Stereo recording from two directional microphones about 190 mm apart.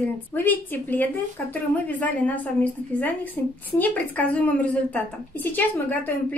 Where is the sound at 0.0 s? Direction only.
10° left (ahead or behind).